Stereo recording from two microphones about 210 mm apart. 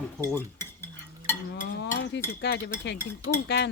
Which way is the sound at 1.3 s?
10° left (ahead or behind).